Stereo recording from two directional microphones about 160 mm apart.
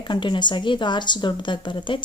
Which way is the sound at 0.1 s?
30° left (ahead or behind).